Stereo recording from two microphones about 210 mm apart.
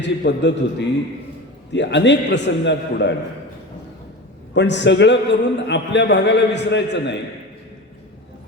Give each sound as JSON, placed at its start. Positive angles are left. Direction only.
{"t": 0.0, "sound": "a man's voice", "side_deg": 55}
{"t": 4.5, "sound": "a man's voice", "side_deg": 55}